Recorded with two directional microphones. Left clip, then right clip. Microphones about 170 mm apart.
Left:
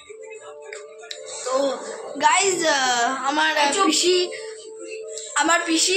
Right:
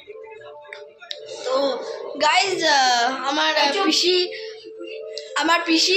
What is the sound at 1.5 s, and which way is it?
A woman's voice, 5° left (ahead or behind).